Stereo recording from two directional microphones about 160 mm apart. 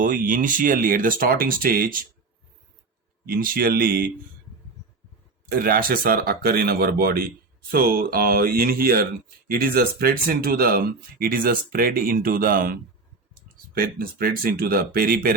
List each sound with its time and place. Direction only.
0.0 s speech: 60° right (ahead or behind)
3.2 s speech: 65° right (ahead or behind)
5.5 s speech: 65° right (ahead or behind)
13.7 s speech: 65° right (ahead or behind)